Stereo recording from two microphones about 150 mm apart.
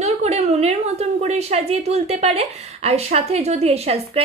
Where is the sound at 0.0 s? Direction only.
45° right (ahead or behind).